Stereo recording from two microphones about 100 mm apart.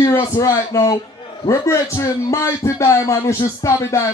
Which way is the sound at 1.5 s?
30° left (ahead or behind).